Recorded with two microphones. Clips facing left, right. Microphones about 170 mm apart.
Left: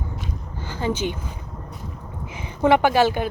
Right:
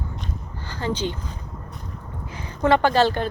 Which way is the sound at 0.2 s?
15° left (ahead or behind).